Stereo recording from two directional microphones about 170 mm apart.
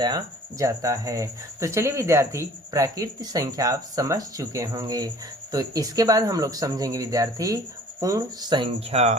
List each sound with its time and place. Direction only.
0.6 s speech: 20° right (ahead or behind); by 9.1 s 40° right (ahead or behind)